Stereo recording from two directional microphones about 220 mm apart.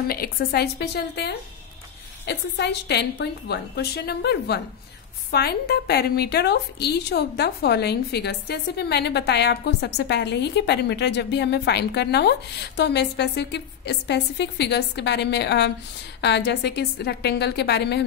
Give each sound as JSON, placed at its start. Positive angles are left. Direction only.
{"t": 0.1, "sound": "a woman's voice", "side_deg": 45}